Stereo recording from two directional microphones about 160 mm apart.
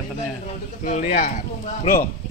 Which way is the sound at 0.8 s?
55° left (ahead or behind).